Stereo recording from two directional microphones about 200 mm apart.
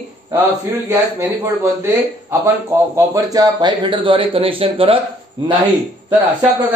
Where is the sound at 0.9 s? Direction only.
15° right (ahead or behind).